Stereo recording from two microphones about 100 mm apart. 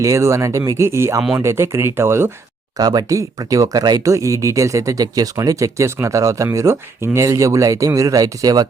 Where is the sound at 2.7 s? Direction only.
40° right (ahead or behind).